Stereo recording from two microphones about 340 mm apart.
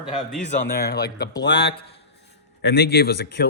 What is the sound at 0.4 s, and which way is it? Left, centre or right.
A man's voice, left.